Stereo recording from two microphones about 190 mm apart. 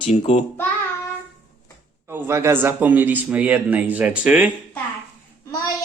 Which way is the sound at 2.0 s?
10° right (ahead or behind).